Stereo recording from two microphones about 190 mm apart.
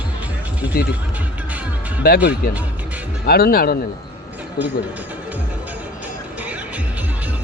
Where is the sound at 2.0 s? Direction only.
55° left (ahead or behind).